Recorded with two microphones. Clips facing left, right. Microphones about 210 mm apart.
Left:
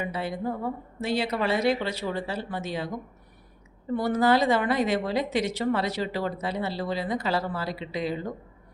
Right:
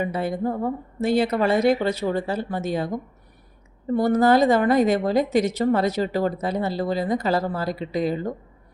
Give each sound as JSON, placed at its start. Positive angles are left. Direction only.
{"t": 0.0, "sound": "a woman's voice", "side_deg": -50}
{"t": 3.9, "sound": "a woman's voice", "side_deg": -45}